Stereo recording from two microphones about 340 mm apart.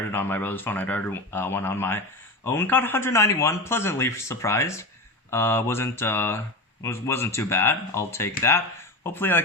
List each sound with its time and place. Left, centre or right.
0.1 s speech: centre